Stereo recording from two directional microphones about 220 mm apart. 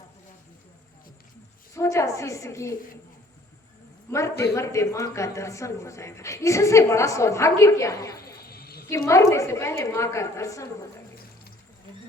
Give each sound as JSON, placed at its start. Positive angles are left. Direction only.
{"t": 1.7, "sound": "speech", "side_deg": 15}
{"t": 4.1, "sound": "speech", "side_deg": 15}
{"t": 8.2, "sound": "a sound", "side_deg": 45}
{"t": 8.9, "sound": "speech", "side_deg": 15}